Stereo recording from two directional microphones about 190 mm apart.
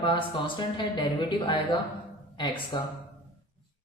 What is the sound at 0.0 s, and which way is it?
Speech, 25° left (ahead or behind).